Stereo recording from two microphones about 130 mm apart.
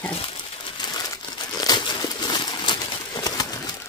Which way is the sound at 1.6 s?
30° left (ahead or behind).